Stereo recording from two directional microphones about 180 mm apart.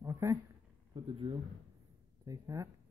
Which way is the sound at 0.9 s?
25° right (ahead or behind).